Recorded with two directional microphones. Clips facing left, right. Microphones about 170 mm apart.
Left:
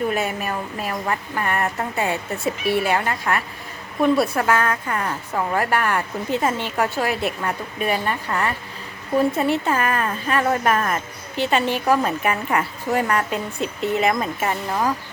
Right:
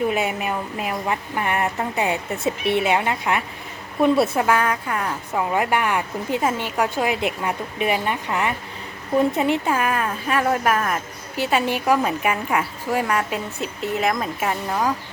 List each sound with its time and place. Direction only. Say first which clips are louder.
0.1 s speech: right 1 dB; 15° right (ahead or behind)
4.0 s a woman's voice: right 1 dB; centre (ahead or behind)
4.4 s speech: even; 10° right (ahead or behind)